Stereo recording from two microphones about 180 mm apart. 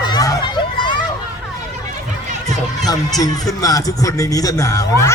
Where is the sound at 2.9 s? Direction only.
20° left (ahead or behind).